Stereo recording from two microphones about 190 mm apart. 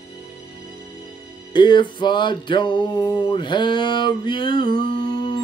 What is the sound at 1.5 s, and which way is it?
Music, 25° left (ahead or behind).